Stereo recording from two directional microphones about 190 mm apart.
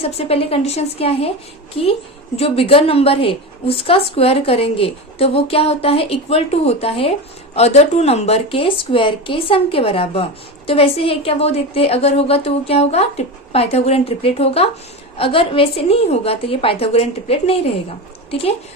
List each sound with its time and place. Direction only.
0.2 s a woman's voice: 30° left (ahead or behind)